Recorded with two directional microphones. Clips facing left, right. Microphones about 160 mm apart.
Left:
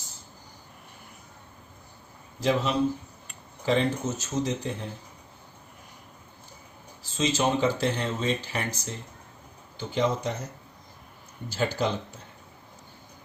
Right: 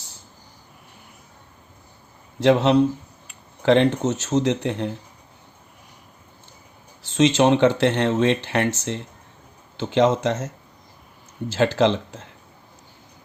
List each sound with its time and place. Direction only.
2.4 s speech: 75° right (ahead or behind)
7.0 s speech: 75° right (ahead or behind)